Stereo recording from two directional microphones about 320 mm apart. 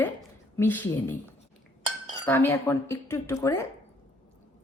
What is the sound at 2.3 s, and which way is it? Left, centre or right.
Cutlery, centre.